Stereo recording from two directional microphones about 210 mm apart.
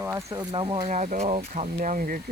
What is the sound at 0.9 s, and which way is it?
Speech, 35° right (ahead or behind).